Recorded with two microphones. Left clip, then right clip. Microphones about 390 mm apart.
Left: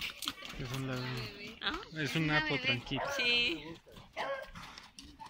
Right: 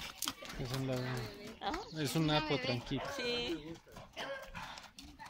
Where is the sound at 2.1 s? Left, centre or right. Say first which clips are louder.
Left 2 dB; centre.